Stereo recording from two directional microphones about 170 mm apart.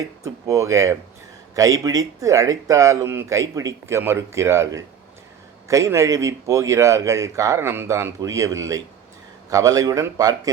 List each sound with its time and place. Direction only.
0.0 s speech: 20° right (ahead or behind)